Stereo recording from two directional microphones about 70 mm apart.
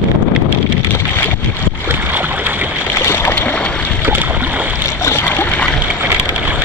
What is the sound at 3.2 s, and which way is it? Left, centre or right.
Boat, left.